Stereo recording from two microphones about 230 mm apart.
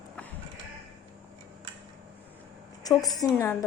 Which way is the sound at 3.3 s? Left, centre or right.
Centre.